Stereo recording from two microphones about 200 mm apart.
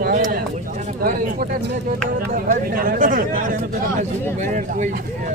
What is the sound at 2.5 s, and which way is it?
Speech, 45° right (ahead or behind).